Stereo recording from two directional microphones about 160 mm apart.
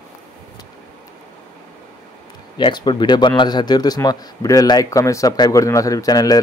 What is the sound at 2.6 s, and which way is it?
Speech, 30° left (ahead or behind).